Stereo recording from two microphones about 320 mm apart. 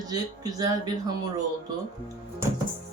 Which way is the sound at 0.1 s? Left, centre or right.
Centre.